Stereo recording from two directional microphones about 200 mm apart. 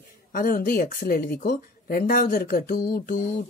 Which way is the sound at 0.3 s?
45° left (ahead or behind).